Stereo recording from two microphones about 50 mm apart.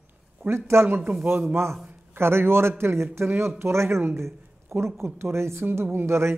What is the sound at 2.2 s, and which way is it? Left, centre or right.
A man's voice, right.